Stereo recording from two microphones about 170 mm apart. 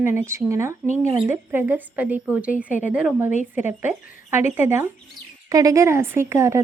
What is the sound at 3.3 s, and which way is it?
Speech, 45° left (ahead or behind).